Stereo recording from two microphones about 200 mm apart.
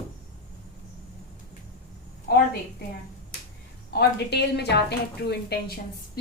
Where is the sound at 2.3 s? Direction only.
50° left (ahead or behind).